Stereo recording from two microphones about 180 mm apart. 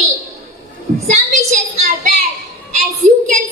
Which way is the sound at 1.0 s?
40° right (ahead or behind).